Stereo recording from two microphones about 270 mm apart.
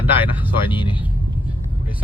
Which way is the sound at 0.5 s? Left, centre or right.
Centre.